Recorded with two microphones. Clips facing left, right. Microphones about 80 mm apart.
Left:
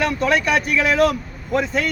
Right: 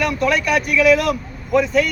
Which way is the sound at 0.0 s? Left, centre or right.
Left.